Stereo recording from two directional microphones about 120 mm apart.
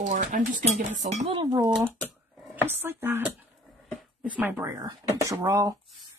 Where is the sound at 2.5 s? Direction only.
15° right (ahead or behind).